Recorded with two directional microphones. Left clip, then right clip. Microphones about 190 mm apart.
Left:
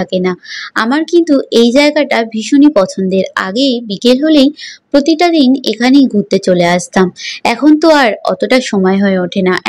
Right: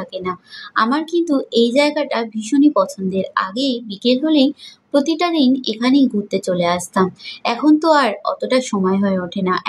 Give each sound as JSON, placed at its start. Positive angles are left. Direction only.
{"t": 0.0, "sound": "speech", "side_deg": 30}